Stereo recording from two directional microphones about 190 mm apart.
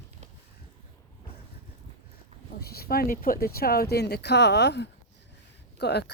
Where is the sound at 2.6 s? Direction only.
55° left (ahead or behind).